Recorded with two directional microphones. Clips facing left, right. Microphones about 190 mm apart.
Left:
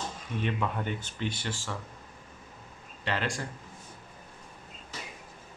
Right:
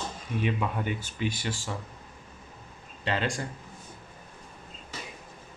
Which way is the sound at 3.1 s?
20° right (ahead or behind).